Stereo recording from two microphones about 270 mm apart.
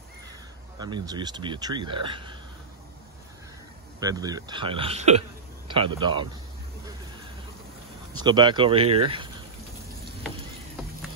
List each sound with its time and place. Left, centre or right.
0.7 s speech: centre
4.0 s speech: centre
8.2 s speech: centre